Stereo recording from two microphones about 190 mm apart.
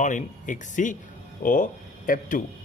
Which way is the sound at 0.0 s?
40° left (ahead or behind).